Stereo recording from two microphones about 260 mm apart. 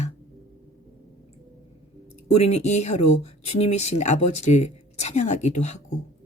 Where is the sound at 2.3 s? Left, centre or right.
Left.